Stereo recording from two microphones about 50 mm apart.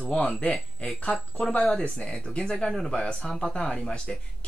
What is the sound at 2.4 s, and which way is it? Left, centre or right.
Speech, centre.